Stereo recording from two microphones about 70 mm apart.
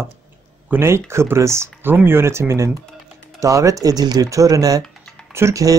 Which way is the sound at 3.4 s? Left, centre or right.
Right.